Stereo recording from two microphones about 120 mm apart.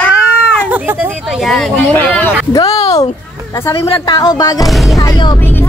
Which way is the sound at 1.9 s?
15° left (ahead or behind).